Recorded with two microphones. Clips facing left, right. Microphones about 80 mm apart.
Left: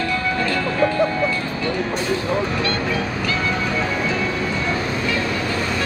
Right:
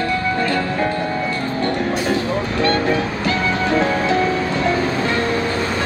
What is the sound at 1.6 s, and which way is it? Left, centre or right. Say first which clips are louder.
Music: right 5 dB; right.